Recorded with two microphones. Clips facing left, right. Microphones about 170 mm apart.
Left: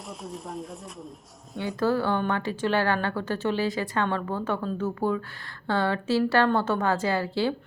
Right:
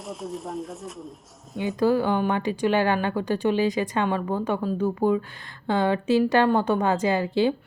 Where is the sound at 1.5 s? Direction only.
20° right (ahead or behind).